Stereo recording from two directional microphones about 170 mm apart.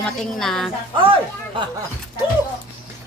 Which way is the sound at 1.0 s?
30° right (ahead or behind).